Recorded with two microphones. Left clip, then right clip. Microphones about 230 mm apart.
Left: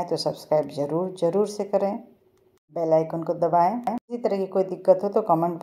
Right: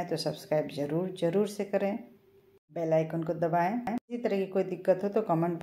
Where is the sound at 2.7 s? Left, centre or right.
Left.